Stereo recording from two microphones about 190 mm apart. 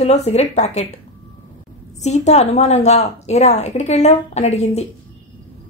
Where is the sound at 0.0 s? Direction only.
35° left (ahead or behind).